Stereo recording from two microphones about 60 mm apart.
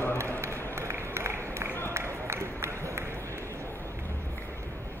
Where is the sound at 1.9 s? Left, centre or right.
Right.